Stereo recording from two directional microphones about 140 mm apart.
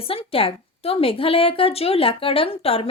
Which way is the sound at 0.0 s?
40° left (ahead or behind).